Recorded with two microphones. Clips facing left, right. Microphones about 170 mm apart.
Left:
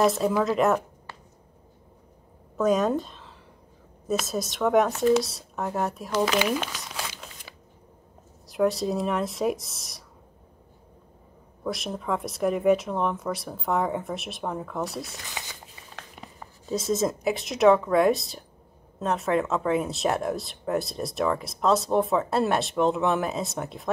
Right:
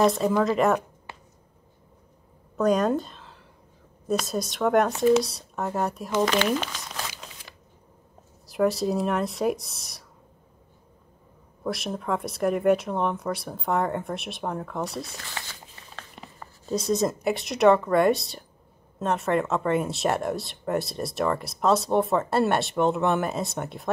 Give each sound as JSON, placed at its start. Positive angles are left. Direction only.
{"t": 0.0, "sound": "speech", "side_deg": 0}
{"t": 2.5, "sound": "a woman's voice", "side_deg": 0}
{"t": 11.6, "sound": "speech", "side_deg": 0}
{"t": 15.2, "sound": "speech", "side_deg": 15}
{"t": 16.0, "sound": "speech", "side_deg": 5}